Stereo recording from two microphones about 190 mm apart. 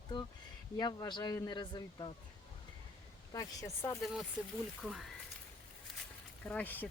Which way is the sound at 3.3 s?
15° left (ahead or behind).